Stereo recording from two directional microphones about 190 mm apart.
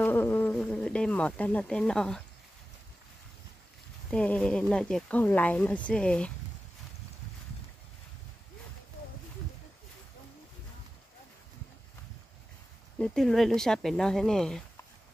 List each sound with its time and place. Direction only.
0.0 s insect: 10° left (ahead or behind)
4.1 s speech: 5° left (ahead or behind)
13.0 s speech: centre (ahead or behind)